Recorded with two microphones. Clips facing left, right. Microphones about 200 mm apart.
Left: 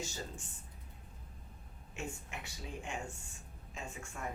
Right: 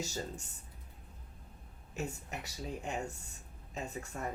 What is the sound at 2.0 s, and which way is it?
Speech, 40° right (ahead or behind).